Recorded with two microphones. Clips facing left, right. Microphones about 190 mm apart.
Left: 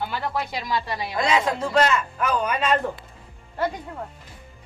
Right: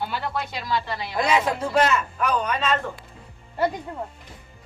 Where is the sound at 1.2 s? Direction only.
5° right (ahead or behind); by 2.8 s 10° left (ahead or behind).